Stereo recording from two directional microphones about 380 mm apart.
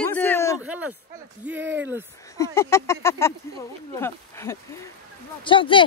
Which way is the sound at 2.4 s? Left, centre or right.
Centre.